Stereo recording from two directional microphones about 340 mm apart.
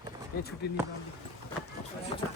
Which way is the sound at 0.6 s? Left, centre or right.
Left.